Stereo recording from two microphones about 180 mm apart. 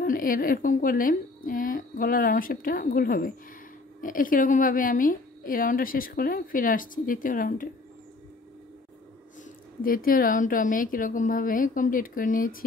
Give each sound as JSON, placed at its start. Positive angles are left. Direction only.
{"t": 0.0, "sound": "a woman's voice", "side_deg": 50}
{"t": 9.4, "sound": "a woman's voice", "side_deg": 50}